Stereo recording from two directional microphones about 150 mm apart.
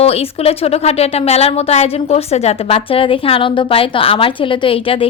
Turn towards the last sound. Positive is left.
turn(degrees=35)  # may be behind; listen again after turning